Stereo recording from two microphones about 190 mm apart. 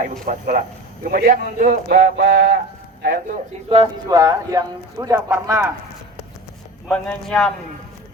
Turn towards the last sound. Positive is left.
turn(degrees=0)  # may be behind; listen again after turning